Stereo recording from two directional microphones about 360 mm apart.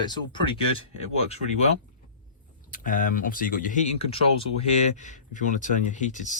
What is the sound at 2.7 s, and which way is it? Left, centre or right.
Speech, left.